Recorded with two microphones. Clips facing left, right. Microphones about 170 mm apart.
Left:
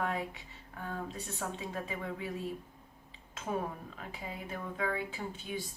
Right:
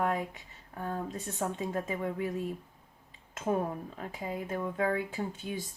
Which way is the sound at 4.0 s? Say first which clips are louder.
Right 6 dB; 45° right (ahead or behind).